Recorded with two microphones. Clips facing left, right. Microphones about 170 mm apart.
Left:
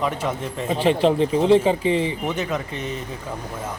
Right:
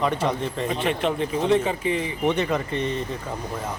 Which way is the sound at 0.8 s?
30° left (ahead or behind).